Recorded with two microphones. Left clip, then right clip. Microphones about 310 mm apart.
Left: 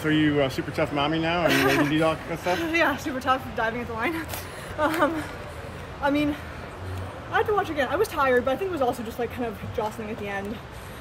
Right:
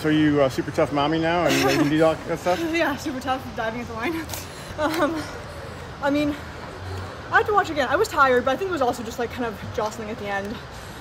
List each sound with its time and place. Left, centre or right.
0.0 s speech: right
1.5 s speech: centre
1.9 s speech: right
2.6 s speech: centre
7.3 s speech: centre